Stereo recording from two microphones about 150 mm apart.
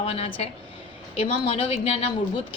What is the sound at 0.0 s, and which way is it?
A woman's voice, 40° left (ahead or behind).